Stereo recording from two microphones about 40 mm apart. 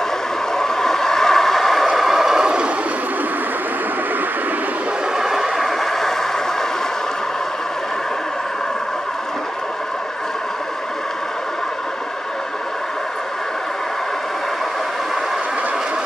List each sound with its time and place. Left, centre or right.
0.6 s vehicle: centre
2.0 s vehicle: centre
2.4 s vehicle: right
5.1 s vehicle: centre
5.9 s vehicle: centre